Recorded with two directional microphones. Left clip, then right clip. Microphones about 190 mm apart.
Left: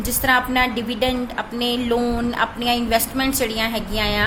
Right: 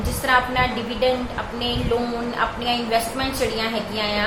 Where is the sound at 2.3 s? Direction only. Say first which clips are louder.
Even; 55° left (ahead or behind).